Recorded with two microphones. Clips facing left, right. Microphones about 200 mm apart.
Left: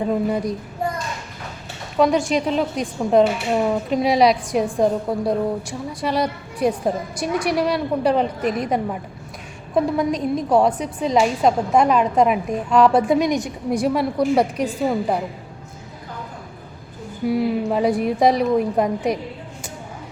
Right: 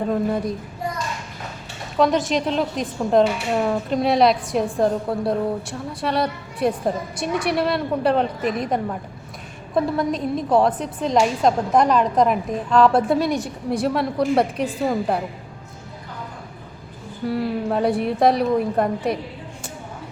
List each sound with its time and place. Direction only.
0.0 s a woman's voice: 5° left (ahead or behind)
2.0 s a woman's voice: centre (ahead or behind)
13.1 s a woman's voice: 15° left (ahead or behind)
13.8 s a woman's voice: 5° left (ahead or behind)
17.3 s a woman's voice: 5° left (ahead or behind)